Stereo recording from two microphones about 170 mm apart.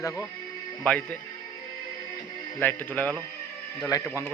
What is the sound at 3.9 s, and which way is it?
Speech, 20° left (ahead or behind).